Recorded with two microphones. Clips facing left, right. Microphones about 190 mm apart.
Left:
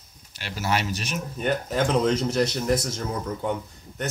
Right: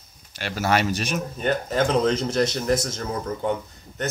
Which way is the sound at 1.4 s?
10° left (ahead or behind).